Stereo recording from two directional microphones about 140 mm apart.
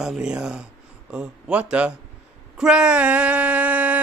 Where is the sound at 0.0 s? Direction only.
5° right (ahead or behind).